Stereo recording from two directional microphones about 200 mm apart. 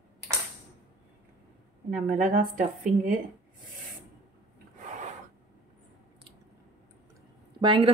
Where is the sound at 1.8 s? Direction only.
40° right (ahead or behind).